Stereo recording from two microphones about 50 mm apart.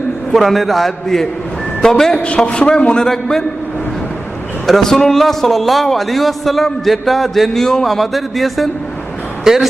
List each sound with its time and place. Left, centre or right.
0.3 s a man's voice: centre
2.1 s a man's voice: left
4.6 s a man's voice: centre
9.4 s speech: centre